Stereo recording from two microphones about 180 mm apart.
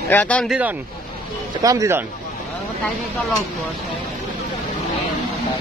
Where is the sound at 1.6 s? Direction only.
20° right (ahead or behind).